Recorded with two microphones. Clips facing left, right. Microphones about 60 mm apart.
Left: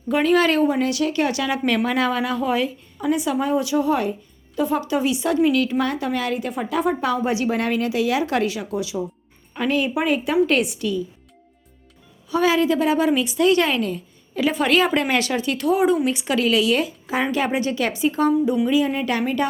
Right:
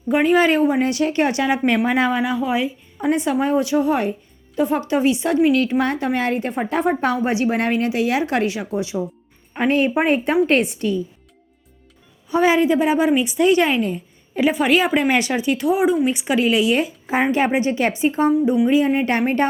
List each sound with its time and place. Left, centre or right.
0.1 s a woman's voice: right
3.0 s a woman's voice: right
12.3 s a woman's voice: right
18.9 s speech: right